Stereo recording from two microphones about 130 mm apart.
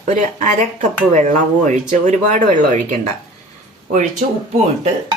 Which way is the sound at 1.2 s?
75° right (ahead or behind).